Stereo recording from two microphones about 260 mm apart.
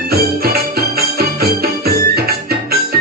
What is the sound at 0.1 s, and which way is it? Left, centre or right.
Music, right.